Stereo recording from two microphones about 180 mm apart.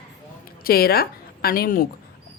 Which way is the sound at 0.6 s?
55° left (ahead or behind).